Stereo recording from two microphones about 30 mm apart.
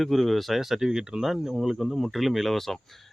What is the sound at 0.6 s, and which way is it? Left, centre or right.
Speech, centre.